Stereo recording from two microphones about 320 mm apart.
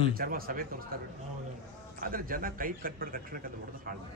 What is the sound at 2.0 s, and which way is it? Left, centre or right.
A man's voice, right.